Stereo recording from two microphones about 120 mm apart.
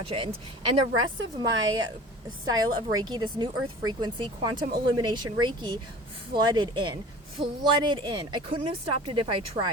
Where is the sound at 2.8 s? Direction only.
35° right (ahead or behind).